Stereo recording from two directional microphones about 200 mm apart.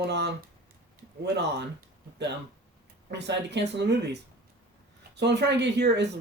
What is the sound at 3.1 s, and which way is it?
Speech, 60° right (ahead or behind).